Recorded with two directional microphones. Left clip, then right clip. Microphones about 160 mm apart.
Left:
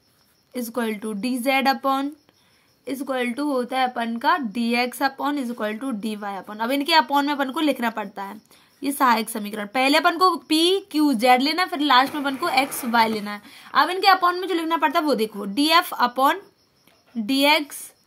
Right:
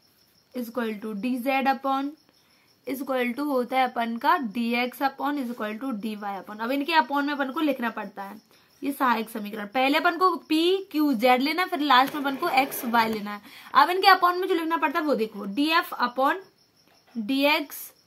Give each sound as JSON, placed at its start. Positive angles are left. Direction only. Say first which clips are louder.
{"t": 0.5, "sound": "speech", "louder": "left 4 dB", "side_deg": 30}
{"t": 2.8, "sound": "a woman's voice", "louder": "left 2 dB", "side_deg": 15}